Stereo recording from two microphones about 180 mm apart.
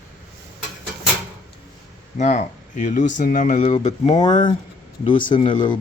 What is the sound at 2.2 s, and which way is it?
Speech, 40° left (ahead or behind).